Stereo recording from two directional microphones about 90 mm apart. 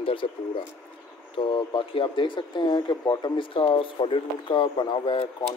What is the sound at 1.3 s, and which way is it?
Speech, 70° left (ahead or behind).